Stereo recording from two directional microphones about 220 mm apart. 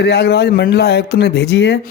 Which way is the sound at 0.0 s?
45° left (ahead or behind).